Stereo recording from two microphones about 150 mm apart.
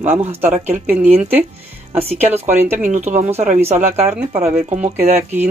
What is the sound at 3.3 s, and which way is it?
Speech, 45° right (ahead or behind).